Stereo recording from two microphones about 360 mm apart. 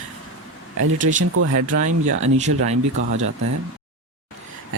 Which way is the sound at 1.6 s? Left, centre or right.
Right.